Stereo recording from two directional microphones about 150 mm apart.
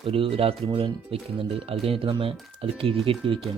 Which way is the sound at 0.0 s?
35° right (ahead or behind).